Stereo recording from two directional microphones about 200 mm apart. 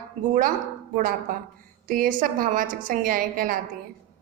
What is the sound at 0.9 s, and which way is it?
A woman's voice, 45° right (ahead or behind).